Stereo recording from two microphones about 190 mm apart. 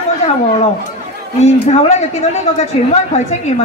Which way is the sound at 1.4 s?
35° left (ahead or behind).